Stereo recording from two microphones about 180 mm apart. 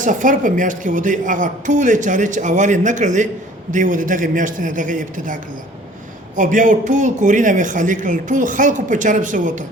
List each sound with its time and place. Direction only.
0.0 s speech: 45° right (ahead or behind)